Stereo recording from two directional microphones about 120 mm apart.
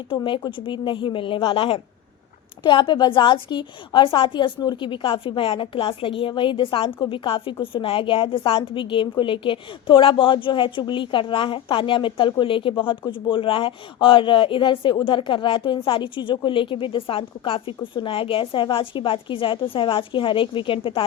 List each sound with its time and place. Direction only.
0.5 s a woman's voice: 45° left (ahead or behind)